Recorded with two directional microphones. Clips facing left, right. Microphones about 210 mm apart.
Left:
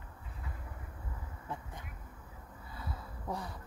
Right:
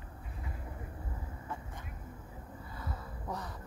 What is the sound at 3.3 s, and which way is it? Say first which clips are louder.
Speech: left 1 dB; 10° left (ahead or behind).